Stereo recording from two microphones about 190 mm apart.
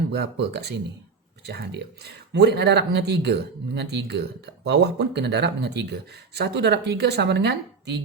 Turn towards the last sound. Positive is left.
turn(degrees=-65)  # may be behind; listen again after turning